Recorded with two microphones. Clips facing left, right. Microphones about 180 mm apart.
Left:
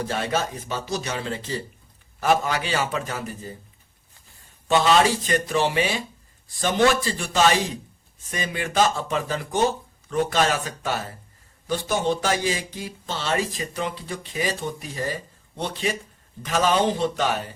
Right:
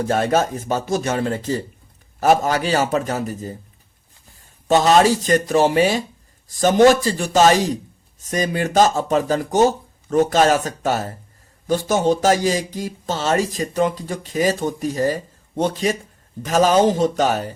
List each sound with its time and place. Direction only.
0.1 s speech: 45° right (ahead or behind)
4.7 s speech: 40° right (ahead or behind)